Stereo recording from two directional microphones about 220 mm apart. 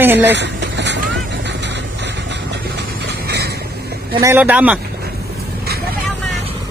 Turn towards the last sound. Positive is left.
turn(degrees=-5)  # may be behind; listen again after turning